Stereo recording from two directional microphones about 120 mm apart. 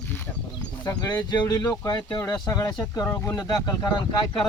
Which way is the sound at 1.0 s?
35° left (ahead or behind).